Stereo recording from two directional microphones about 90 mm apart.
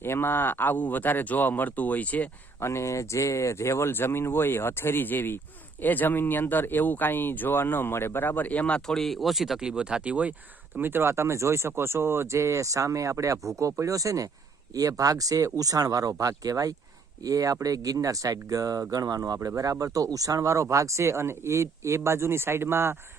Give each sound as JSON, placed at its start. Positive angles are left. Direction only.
{"t": 0.0, "sound": "speech", "side_deg": 25}
{"t": 2.6, "sound": "speech", "side_deg": 30}